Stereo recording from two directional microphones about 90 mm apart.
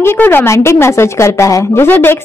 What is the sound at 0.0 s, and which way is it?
A woman's voice, 25° left (ahead or behind).